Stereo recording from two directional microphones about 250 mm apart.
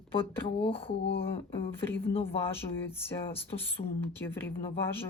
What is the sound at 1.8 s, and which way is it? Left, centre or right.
Speech, centre.